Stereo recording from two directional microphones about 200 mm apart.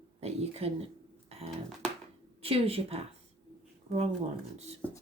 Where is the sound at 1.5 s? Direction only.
Centre (ahead or behind).